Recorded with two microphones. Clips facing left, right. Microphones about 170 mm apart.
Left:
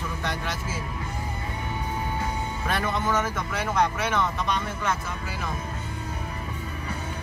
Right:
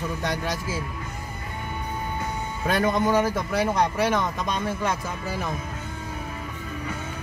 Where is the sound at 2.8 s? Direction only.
40° right (ahead or behind).